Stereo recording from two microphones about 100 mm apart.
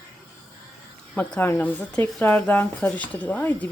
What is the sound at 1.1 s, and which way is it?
Speech, 15° left (ahead or behind).